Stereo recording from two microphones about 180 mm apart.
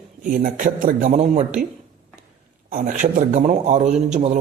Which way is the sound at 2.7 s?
45° right (ahead or behind).